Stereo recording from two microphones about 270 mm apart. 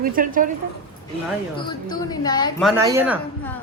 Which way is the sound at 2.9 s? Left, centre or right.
Centre.